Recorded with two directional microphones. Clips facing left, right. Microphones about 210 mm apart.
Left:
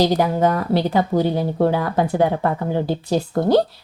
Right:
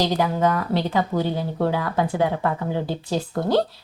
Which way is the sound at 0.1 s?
40° left (ahead or behind).